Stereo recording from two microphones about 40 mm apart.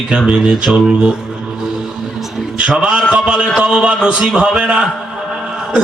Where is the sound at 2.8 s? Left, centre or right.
Right.